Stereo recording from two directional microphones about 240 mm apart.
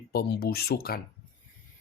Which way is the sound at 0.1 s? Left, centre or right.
Left.